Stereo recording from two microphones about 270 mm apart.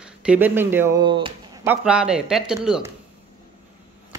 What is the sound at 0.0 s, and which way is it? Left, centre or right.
Speech, centre.